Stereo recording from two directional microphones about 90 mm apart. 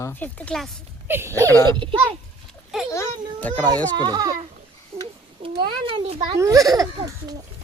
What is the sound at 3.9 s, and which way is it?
Speech, 50° right (ahead or behind).